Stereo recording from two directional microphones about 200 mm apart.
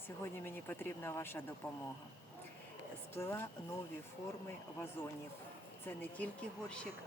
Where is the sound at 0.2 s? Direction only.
10° left (ahead or behind).